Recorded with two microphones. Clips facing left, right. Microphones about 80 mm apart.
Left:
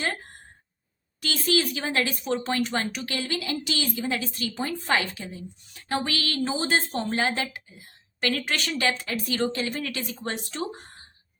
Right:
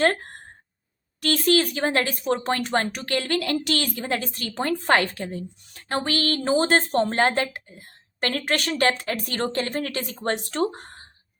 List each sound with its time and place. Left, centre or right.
0.0 s speech: right